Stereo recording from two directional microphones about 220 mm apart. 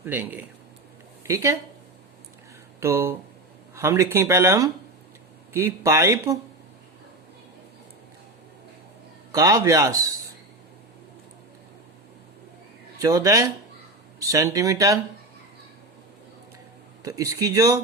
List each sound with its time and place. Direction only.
0.0 s speech: 10° right (ahead or behind)
2.8 s speech: 10° right (ahead or behind)
9.3 s speech: 15° right (ahead or behind)
13.0 s speech: 15° right (ahead or behind)
17.0 s speech: 15° right (ahead or behind)